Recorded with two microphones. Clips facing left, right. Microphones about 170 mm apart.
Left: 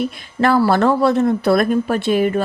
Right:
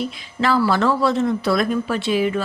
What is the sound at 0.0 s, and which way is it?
A man's voice, 55° left (ahead or behind).